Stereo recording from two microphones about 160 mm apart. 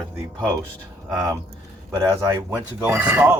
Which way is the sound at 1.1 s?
25° right (ahead or behind).